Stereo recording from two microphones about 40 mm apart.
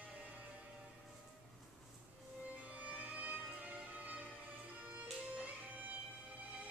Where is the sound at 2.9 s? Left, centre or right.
Right.